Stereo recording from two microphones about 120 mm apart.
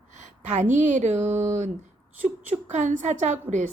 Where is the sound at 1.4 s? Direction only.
90° right.